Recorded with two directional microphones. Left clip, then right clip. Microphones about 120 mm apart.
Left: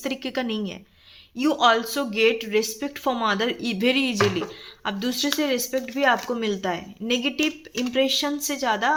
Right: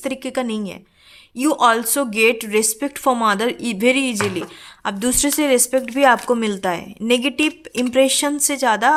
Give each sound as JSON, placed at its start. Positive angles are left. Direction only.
{"t": 0.0, "sound": "a woman's voice", "side_deg": -40}
{"t": 4.9, "sound": "speech", "side_deg": -65}